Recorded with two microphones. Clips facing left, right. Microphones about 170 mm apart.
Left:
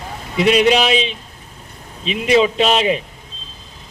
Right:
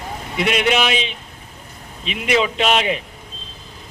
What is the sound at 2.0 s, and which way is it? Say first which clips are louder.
Speech: left 5 dB; 30° left (ahead or behind).